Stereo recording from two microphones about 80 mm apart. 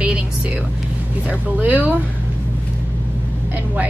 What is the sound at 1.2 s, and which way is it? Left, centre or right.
Speech, centre.